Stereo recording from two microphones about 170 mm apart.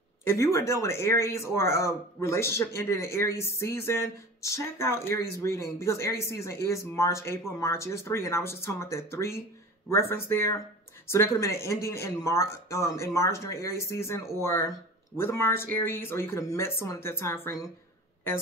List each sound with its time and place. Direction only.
0.2 s speech: 15° left (ahead or behind)